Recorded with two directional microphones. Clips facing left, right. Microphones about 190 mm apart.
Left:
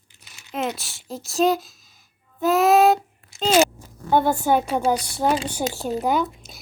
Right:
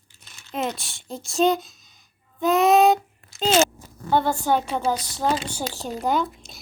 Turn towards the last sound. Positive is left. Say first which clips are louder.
# left 1 dB
turn(degrees=5)  # may be behind; listen again after turning